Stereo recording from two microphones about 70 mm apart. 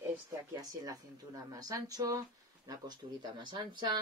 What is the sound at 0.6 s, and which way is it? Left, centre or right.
Speech, right.